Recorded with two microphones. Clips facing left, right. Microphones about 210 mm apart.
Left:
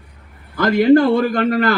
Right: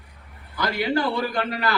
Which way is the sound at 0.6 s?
50° left (ahead or behind).